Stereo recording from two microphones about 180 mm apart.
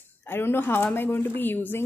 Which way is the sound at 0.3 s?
10° left (ahead or behind).